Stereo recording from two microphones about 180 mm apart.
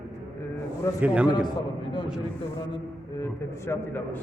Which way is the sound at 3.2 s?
15° left (ahead or behind).